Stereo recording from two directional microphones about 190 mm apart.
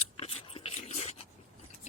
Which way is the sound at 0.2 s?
30° left (ahead or behind).